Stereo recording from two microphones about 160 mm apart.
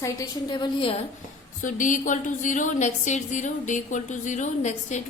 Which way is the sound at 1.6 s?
55° left (ahead or behind).